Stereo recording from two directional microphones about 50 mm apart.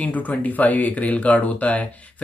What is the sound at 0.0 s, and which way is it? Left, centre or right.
Mantra, left.